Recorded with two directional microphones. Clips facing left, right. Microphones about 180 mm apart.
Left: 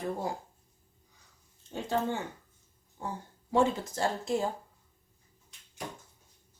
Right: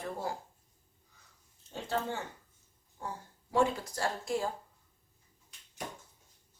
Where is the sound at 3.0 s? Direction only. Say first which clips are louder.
Left 3 dB; 20° left (ahead or behind).